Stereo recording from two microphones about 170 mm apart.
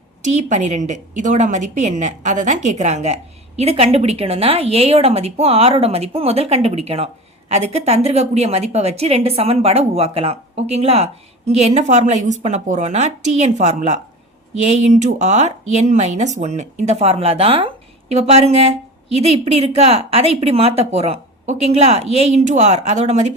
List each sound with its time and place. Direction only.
0.2 s a woman's voice: 45° right (ahead or behind)